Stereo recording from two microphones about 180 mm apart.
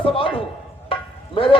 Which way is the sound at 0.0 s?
30° left (ahead or behind).